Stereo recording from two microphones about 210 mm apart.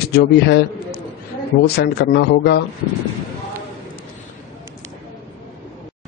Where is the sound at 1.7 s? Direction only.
50° left (ahead or behind).